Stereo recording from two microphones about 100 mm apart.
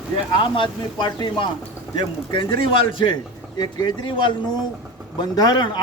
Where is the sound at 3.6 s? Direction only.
45° left (ahead or behind).